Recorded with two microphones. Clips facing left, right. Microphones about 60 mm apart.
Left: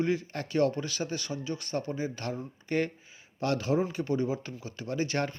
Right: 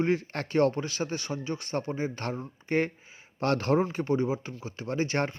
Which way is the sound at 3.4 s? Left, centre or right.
Right.